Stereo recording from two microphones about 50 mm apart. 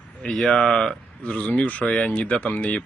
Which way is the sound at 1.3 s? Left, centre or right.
Left.